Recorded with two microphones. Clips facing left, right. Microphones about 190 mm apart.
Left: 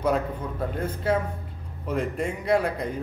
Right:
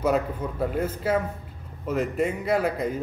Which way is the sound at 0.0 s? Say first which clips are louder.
Right 1 dB; 5° right (ahead or behind).